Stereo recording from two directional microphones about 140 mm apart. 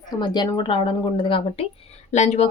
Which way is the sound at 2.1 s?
55° left (ahead or behind).